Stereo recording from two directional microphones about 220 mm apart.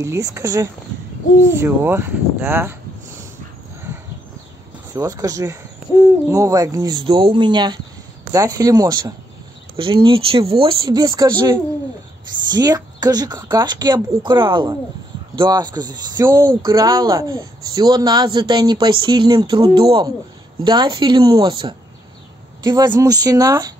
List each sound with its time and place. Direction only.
0.0 s speech: 15° right (ahead or behind)
4.9 s speech: 15° right (ahead or behind)